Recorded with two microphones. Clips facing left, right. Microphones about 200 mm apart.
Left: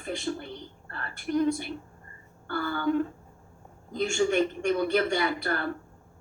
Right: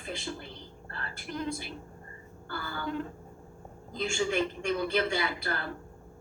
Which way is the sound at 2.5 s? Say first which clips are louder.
Left 9 dB; 55° left (ahead or behind).